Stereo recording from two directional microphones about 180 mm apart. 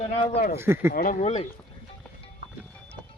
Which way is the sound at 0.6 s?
15° right (ahead or behind).